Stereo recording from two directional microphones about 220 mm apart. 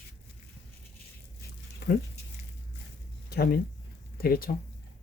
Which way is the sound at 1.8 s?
45° left (ahead or behind).